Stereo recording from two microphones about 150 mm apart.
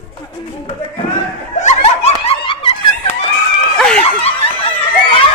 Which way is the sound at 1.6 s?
50° left (ahead or behind).